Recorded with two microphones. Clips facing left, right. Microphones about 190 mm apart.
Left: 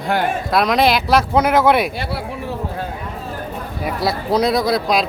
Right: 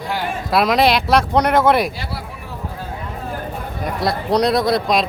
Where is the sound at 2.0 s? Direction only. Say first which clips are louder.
Left 5 dB; 60° left (ahead or behind).